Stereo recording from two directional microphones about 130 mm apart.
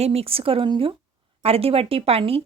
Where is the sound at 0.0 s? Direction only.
50° right (ahead or behind).